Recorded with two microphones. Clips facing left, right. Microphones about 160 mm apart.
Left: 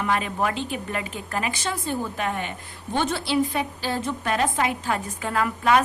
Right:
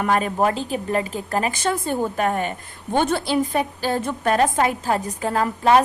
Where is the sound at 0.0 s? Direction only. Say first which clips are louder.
Right 5 dB; 45° right (ahead or behind).